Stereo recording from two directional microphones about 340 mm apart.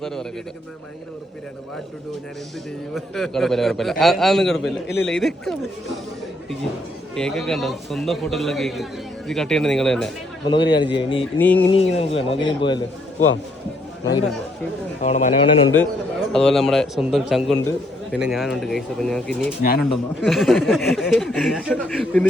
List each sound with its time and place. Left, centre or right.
0.0 s a man's voice: centre
2.9 s a man's voice: centre
7.2 s a man's voice: centre
10.4 s a man's voice: centre
11.7 s speech: centre
15.0 s a man's voice: centre
16.3 s a man's voice: centre